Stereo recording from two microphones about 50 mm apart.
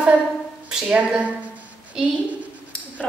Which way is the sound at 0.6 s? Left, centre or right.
Centre.